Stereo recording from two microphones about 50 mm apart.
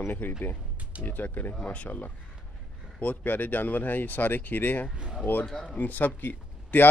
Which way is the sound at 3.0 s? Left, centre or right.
Left.